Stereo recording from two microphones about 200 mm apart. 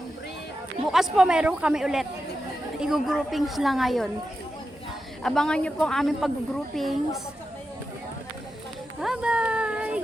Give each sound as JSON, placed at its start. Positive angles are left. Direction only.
{"t": 0.9, "sound": "speech", "side_deg": 0}
{"t": 5.2, "sound": "speech", "side_deg": 0}
{"t": 9.0, "sound": "a sound", "side_deg": -5}